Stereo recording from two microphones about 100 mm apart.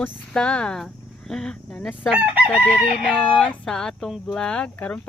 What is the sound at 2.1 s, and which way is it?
Chicken, 15° right (ahead or behind).